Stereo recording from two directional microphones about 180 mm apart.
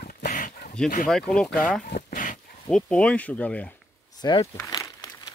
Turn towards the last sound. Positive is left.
turn(degrees=20)  # may be behind; listen again after turning